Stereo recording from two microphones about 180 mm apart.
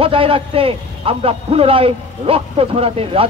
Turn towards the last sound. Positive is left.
turn(degrees=-30)  # may be behind; listen again after turning